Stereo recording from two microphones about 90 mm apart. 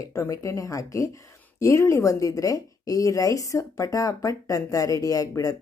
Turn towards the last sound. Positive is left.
turn(degrees=40)  # may be behind; listen again after turning